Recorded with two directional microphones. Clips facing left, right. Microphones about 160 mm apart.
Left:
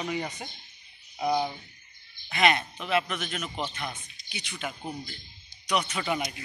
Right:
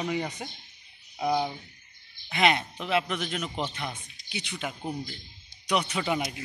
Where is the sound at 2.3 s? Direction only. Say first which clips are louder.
Even; 20° right (ahead or behind).